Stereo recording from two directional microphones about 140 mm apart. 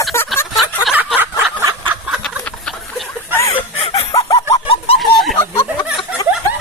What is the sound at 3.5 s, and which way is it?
Chicken, 40° left (ahead or behind).